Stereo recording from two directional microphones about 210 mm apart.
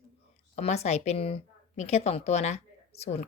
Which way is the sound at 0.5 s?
30° left (ahead or behind).